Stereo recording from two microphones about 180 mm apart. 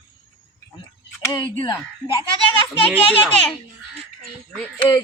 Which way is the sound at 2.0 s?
20° left (ahead or behind).